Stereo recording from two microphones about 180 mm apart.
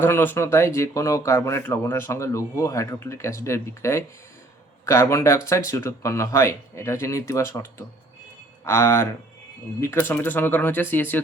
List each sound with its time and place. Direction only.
0.0 s speech: 10° left (ahead or behind)